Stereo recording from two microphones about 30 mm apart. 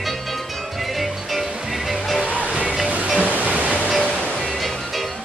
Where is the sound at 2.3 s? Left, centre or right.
Left.